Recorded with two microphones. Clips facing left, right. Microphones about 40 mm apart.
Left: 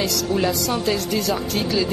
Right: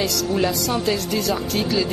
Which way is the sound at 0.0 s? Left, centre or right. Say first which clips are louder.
Even; centre.